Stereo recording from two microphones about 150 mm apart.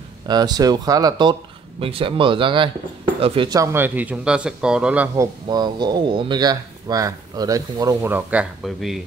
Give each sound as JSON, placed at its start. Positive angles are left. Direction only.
{"t": 0.3, "sound": "a man's voice", "side_deg": -25}
{"t": 1.8, "sound": "speech", "side_deg": -35}
{"t": 3.4, "sound": "a man's voice", "side_deg": -20}